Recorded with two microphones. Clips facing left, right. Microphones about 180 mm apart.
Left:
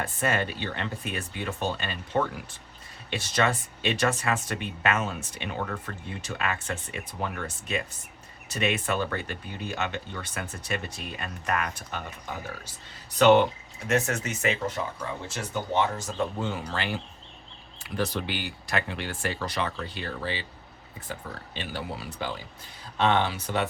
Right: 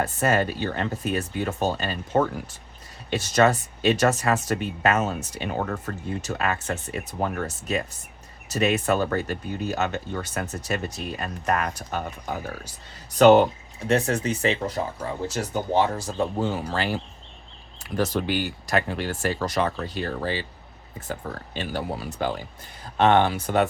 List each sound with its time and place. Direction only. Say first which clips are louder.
0.0 s speech: right 5 dB; 40° right (ahead or behind)